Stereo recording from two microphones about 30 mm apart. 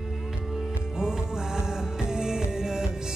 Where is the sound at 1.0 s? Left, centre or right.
Right.